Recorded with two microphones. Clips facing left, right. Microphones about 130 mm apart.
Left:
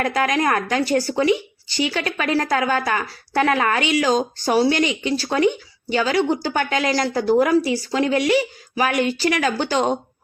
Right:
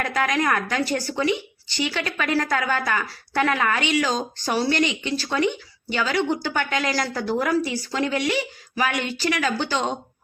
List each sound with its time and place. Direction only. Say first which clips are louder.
0.0 s a woman's voice: left 3 dB; 40° left (ahead or behind)